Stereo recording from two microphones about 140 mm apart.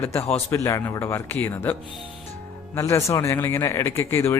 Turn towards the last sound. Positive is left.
turn(degrees=15)  # may be behind; listen again after turning